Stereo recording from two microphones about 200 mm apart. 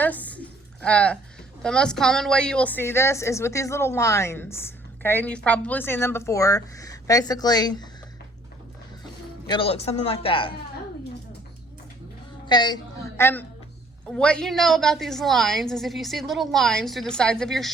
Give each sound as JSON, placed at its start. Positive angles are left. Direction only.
{"t": 0.0, "sound": "a sound", "side_deg": 10}
{"t": 1.6, "sound": "a woman's voice", "side_deg": 5}
{"t": 9.5, "sound": "speech", "side_deg": 30}
{"t": 12.5, "sound": "a woman's voice", "side_deg": 20}